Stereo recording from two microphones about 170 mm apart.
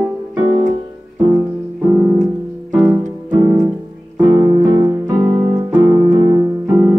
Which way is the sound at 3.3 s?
25° right (ahead or behind).